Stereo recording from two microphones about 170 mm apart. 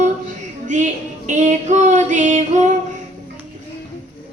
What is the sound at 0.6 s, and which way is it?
Female singing, 45° right (ahead or behind).